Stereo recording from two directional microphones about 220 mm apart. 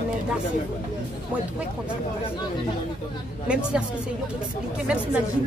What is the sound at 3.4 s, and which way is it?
Speech, 5° right (ahead or behind).